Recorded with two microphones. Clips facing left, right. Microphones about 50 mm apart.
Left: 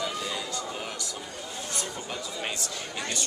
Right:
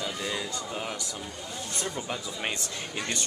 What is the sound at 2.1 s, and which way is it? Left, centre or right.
Speech, centre.